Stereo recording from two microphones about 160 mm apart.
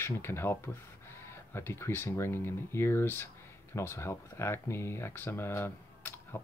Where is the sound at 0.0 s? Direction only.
15° left (ahead or behind).